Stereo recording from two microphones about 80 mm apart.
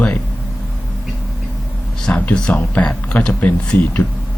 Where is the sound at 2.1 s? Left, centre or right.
Centre.